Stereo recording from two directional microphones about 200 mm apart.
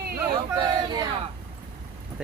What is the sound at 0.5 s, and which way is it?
Speech, 20° right (ahead or behind).